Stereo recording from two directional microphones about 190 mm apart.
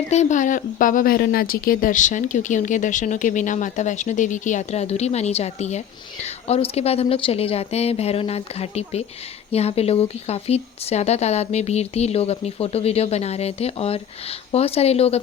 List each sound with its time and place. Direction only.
0.1 s speech: 40° left (ahead or behind)